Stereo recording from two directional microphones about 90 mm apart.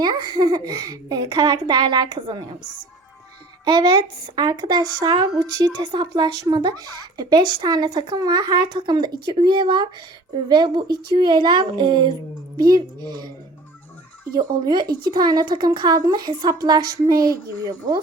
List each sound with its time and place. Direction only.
0.0 s speech: 50° right (ahead or behind)
3.7 s speech: 55° right (ahead or behind)
12.5 s speech: 45° right (ahead or behind)
14.3 s speech: 55° right (ahead or behind)